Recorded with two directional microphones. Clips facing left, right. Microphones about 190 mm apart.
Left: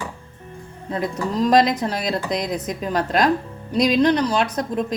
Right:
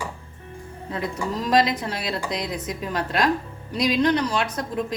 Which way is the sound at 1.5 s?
40° left (ahead or behind).